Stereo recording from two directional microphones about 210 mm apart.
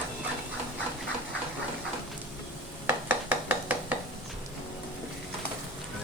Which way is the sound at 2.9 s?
10° right (ahead or behind).